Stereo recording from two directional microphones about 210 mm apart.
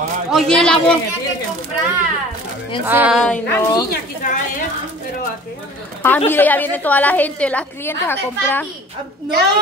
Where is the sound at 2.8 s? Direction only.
10° right (ahead or behind).